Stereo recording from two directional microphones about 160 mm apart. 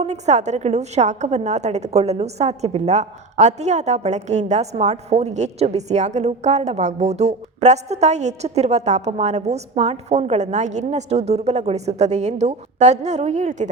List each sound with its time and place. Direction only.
0.0 s a woman's voice: 45° right (ahead or behind)